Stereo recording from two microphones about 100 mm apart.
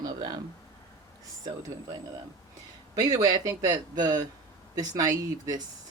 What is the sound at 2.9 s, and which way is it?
Speech, 40° right (ahead or behind).